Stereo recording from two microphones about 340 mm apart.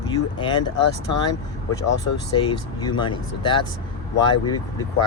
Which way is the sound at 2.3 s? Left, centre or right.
Centre.